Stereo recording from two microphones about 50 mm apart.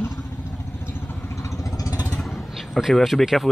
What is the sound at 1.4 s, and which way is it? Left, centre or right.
Vehicle, left.